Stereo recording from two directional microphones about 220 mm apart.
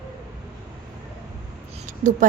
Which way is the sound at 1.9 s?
35° right (ahead or behind).